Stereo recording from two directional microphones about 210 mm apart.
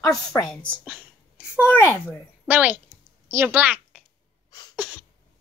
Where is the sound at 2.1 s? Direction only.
10° right (ahead or behind).